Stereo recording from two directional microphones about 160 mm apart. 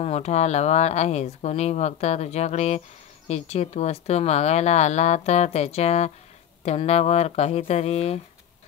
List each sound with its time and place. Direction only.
0.0 s speech: 45° left (ahead or behind)